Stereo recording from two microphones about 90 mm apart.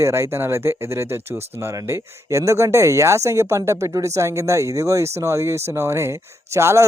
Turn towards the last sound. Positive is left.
turn(degrees=-30)  # may be behind; listen again after turning